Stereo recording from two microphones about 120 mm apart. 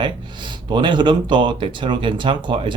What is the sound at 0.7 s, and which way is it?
Speech, 40° right (ahead or behind).